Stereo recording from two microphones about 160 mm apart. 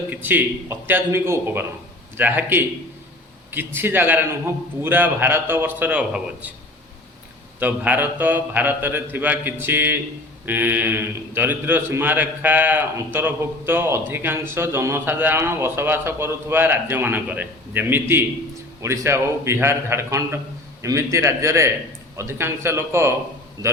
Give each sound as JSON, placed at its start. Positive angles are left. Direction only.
{"t": 0.1, "sound": "a man's voice", "side_deg": -10}
{"t": 7.6, "sound": "a man's voice", "side_deg": -10}